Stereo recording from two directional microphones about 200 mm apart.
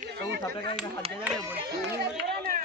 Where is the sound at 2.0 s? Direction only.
50° right (ahead or behind).